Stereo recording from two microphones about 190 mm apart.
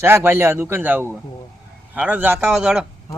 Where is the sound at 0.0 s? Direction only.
15° right (ahead or behind).